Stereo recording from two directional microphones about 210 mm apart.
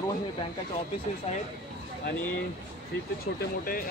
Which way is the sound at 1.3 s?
30° left (ahead or behind).